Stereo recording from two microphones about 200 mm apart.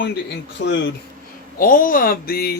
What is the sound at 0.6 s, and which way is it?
Speech, 60° left (ahead or behind).